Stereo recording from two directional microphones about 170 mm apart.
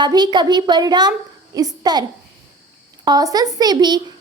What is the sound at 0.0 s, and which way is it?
A woman's voice, 25° right (ahead or behind).